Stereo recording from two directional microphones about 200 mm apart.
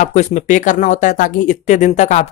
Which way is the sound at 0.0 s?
35° left (ahead or behind).